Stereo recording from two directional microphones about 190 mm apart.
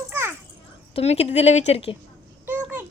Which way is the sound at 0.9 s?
35° left (ahead or behind).